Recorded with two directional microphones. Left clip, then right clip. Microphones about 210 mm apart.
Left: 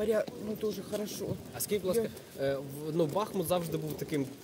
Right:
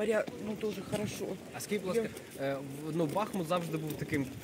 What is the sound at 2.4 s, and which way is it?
Speech, 50° left (ahead or behind).